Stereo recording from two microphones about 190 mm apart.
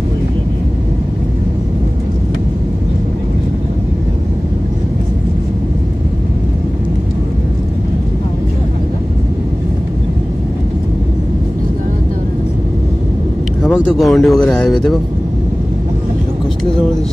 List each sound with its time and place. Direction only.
13.6 s speech: centre (ahead or behind)